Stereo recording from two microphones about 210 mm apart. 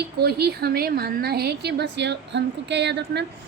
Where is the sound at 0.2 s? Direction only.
50° right (ahead or behind).